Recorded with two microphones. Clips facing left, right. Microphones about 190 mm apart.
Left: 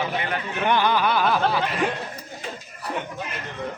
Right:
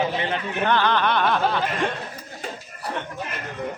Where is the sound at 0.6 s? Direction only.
15° left (ahead or behind).